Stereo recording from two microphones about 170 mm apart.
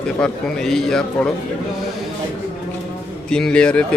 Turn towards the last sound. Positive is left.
turn(degrees=5)  # may be behind; listen again after turning